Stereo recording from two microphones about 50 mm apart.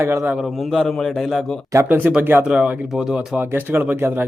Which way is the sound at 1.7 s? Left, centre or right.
Right.